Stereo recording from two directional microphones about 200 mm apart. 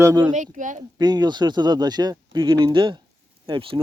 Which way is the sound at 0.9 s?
20° right (ahead or behind).